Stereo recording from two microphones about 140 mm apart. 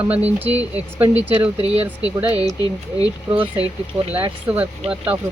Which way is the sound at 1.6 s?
45° right (ahead or behind).